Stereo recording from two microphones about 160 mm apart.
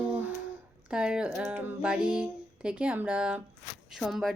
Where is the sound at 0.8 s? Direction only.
5° right (ahead or behind).